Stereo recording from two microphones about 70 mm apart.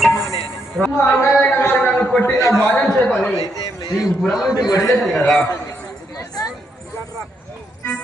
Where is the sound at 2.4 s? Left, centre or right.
Left.